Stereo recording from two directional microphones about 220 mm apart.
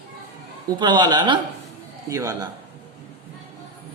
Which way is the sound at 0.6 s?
20° right (ahead or behind).